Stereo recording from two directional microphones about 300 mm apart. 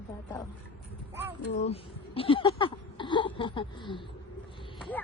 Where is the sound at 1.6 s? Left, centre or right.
Centre.